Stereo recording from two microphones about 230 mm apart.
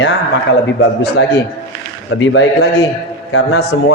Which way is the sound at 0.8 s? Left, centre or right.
Left.